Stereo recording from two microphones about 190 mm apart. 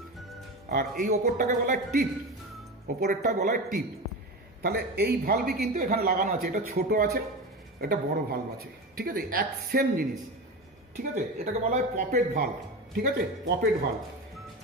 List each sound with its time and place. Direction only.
0.7 s a man's voice: 50° right (ahead or behind)
3.0 s a man's voice: 50° right (ahead or behind)
4.6 s a man's voice: 60° right (ahead or behind); by 12.4 s 40° right (ahead or behind)
12.9 s a man's voice: 55° right (ahead or behind)